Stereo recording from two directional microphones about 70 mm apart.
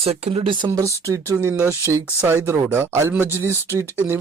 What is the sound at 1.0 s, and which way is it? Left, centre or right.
Speech, right.